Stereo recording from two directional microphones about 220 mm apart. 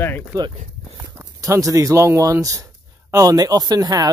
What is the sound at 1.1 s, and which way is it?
Speech, 15° right (ahead or behind).